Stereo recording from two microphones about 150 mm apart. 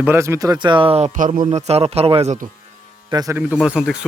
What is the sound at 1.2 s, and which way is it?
Speech, 60° right (ahead or behind).